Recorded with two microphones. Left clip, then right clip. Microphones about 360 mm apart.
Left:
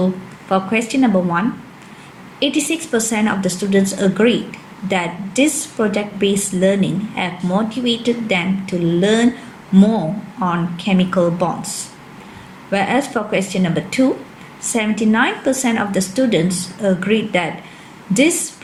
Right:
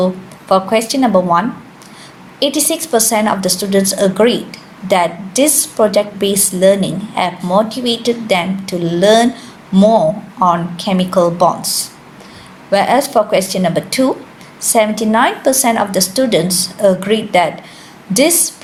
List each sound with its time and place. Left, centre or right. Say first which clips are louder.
0.5 s a woman's voice: right 5 dB; centre
10.4 s a woman's voice: right 8 dB; centre
12.7 s a woman's voice: right 7 dB; centre